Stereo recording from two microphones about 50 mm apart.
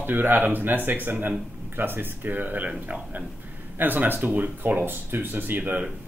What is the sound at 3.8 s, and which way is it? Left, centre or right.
Speech, right.